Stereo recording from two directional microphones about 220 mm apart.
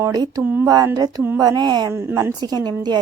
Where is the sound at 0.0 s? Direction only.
15° right (ahead or behind).